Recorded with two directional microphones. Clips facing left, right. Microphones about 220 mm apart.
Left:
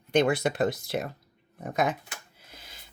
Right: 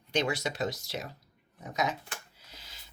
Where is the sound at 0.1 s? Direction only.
55° left (ahead or behind).